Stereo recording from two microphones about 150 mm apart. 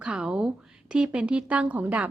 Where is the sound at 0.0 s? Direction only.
5° right (ahead or behind).